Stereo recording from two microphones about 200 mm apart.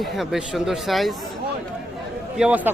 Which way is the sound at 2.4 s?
5° right (ahead or behind).